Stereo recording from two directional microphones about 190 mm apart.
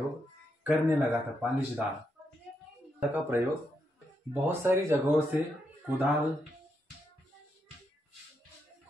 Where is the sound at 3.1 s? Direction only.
10° right (ahead or behind).